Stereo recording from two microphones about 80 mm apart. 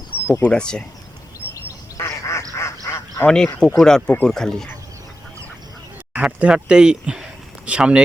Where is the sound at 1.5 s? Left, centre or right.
Left.